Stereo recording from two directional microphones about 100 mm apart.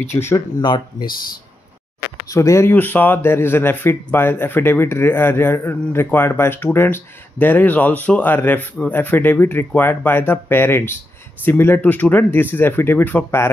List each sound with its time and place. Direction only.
0.1 s speech: 25° left (ahead or behind)
0.6 s speech: 50° left (ahead or behind)
2.2 s speech: 30° left (ahead or behind)
2.7 s speech: 20° left (ahead or behind)